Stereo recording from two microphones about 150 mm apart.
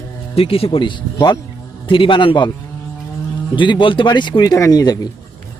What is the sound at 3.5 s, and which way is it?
Speech, 35° left (ahead or behind).